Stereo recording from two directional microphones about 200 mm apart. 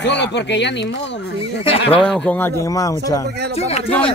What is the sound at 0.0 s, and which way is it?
Speech, 60° left (ahead or behind).